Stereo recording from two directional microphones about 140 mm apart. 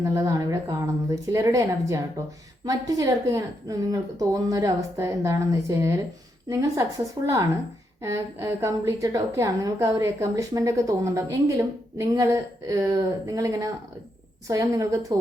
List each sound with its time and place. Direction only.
0.0 s a woman's voice: 25° right (ahead or behind)
8.0 s a woman's voice: 20° right (ahead or behind)